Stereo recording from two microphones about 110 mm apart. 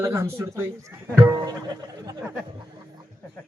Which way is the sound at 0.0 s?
25° right (ahead or behind).